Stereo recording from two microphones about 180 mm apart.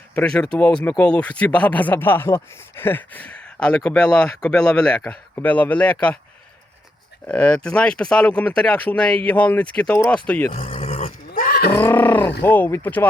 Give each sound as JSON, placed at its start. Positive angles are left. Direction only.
{"t": 0.1, "sound": "speech", "side_deg": 5}
{"t": 7.3, "sound": "speech", "side_deg": 5}
{"t": 10.8, "sound": "roar", "side_deg": 40}
{"t": 11.8, "sound": "speech", "side_deg": 10}